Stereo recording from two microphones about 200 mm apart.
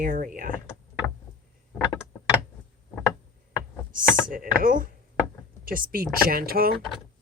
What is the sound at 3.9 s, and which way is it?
Speech, 45° right (ahead or behind).